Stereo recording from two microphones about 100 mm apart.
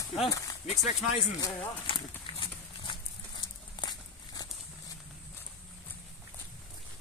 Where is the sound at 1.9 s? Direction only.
60° left (ahead or behind).